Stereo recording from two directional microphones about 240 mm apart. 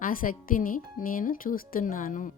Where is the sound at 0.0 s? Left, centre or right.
Left.